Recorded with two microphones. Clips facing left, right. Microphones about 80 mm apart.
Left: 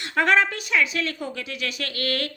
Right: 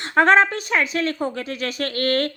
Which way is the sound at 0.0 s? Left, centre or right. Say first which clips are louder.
Right 5 dB; right.